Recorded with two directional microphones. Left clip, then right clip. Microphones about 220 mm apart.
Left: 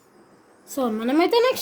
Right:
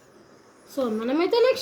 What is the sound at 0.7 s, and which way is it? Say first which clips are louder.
Speech: left 2 dB; 45° left (ahead or behind).